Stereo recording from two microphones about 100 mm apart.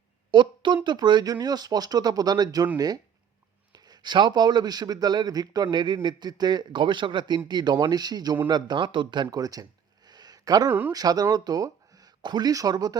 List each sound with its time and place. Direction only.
0.3 s a sound: 50° right (ahead or behind)
0.9 s a man's voice: 50° right (ahead or behind)
9.4 s speech: 40° right (ahead or behind)
10.1 s a sound: 45° right (ahead or behind)
10.7 s speech: 15° right (ahead or behind)
10.9 s speech: 40° right (ahead or behind)